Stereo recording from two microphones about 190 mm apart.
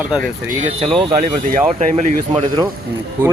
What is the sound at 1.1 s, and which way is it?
Speech, 35° right (ahead or behind).